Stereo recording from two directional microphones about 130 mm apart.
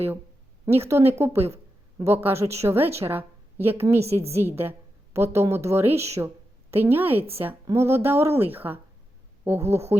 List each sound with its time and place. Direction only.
0.7 s a woman's voice: 20° right (ahead or behind)
4.1 s a woman's voice: 50° right (ahead or behind)
4.4 s a woman's voice: 15° right (ahead or behind)